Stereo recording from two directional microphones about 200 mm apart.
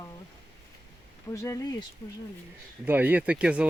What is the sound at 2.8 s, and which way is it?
Speech, 10° right (ahead or behind).